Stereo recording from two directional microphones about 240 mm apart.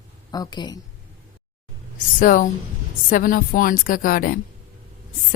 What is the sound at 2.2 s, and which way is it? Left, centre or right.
Speech, left.